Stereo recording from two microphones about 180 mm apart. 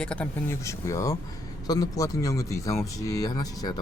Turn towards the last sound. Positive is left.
turn(degrees=20)  # may be behind; listen again after turning